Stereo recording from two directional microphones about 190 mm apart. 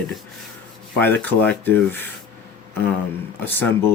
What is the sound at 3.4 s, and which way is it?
Speech, 10° left (ahead or behind).